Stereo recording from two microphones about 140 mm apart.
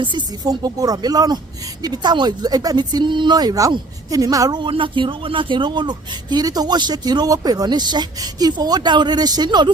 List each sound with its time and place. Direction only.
0.0 s speech: 35° right (ahead or behind)